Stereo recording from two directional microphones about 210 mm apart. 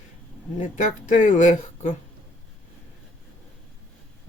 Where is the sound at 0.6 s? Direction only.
35° left (ahead or behind).